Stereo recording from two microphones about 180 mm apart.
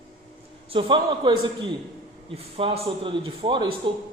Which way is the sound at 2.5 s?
30° right (ahead or behind).